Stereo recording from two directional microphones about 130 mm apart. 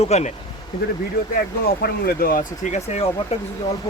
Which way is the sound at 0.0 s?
60° left (ahead or behind).